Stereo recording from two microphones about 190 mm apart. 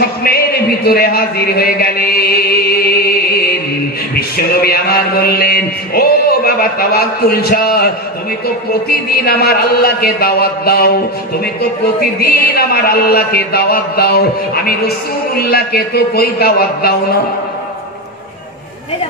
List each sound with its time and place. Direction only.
0.2 s a man's voice: 55° left (ahead or behind)
12.0 s a man's voice: 55° left (ahead or behind)